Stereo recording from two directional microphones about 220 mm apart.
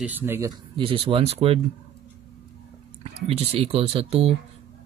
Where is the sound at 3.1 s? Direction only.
25° right (ahead or behind).